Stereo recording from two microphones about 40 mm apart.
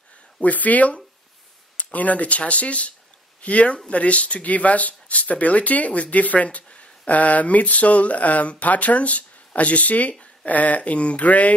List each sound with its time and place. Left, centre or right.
0.4 s speech: left